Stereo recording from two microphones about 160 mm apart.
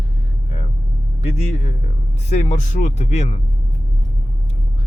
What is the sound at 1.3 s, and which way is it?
Speech, 45° left (ahead or behind).